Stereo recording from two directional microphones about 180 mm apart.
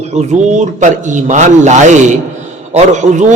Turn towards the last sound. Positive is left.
turn(degrees=-40)  # may be behind; listen again after turning